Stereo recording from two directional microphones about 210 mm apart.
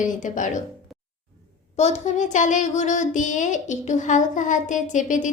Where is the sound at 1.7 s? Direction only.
30° left (ahead or behind).